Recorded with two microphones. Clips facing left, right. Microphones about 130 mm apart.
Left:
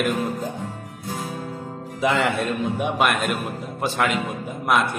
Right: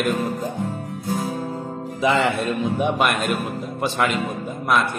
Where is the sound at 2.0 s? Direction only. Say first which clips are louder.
Right 1 dB; centre (ahead or behind).